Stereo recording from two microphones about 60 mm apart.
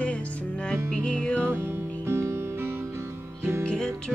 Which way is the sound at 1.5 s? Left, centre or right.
Right.